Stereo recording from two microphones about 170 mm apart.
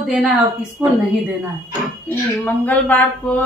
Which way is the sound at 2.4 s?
10° left (ahead or behind).